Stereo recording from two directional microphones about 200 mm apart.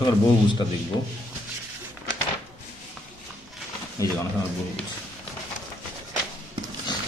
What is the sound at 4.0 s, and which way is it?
Speech, 15° left (ahead or behind).